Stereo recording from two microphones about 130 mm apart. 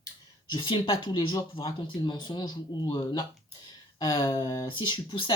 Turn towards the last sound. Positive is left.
turn(degrees=40)  # may be behind; listen again after turning